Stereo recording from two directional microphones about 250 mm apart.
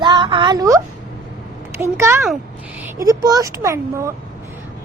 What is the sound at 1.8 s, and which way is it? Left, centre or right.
Speech, centre.